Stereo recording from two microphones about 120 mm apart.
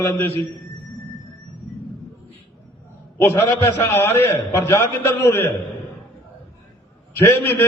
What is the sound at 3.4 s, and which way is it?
A man's voice, 20° left (ahead or behind).